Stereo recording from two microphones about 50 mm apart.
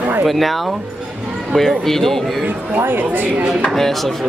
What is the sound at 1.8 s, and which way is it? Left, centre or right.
Speech, centre.